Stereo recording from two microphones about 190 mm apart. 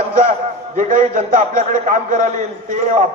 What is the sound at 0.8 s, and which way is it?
A man's voice, 45° right (ahead or behind).